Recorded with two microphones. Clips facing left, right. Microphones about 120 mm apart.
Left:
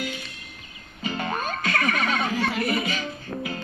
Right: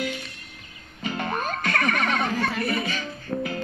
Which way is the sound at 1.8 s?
5° left (ahead or behind).